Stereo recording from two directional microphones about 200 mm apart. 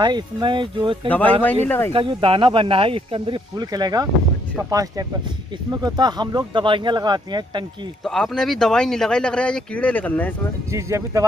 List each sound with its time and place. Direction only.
0.0 s speech: 20° right (ahead or behind)
1.0 s speech: 10° left (ahead or behind)
1.9 s speech: 25° right (ahead or behind)
8.0 s speech: centre (ahead or behind)
10.7 s speech: 15° right (ahead or behind)